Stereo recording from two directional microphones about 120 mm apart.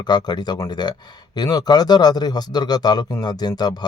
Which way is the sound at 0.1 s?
35° left (ahead or behind).